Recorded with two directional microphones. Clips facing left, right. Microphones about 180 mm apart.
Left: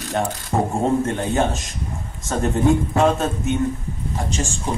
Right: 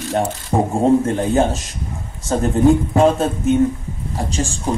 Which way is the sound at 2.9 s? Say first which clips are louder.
Right 4 dB; 35° right (ahead or behind).